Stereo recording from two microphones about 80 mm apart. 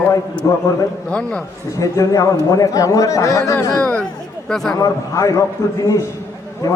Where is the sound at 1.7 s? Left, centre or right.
Left.